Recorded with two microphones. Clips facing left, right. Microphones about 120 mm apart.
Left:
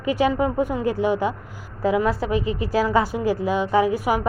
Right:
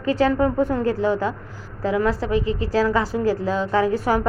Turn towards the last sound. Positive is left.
turn(degrees=15)  # may be behind; listen again after turning